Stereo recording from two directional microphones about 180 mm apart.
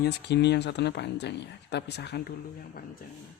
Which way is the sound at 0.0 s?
70° left (ahead or behind).